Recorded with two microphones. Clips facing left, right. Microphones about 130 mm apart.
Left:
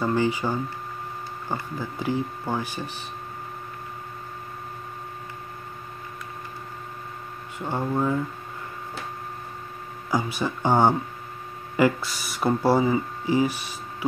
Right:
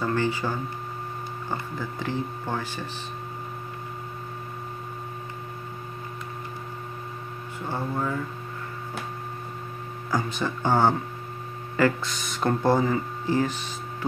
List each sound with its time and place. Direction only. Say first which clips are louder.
0.0 s speech: left 2 dB; 15° left (ahead or behind)
7.5 s speech: left 4 dB; 15° left (ahead or behind)
10.1 s speech: left 2 dB; 10° left (ahead or behind)